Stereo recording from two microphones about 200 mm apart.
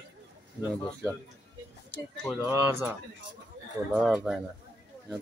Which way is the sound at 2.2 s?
Centre (ahead or behind).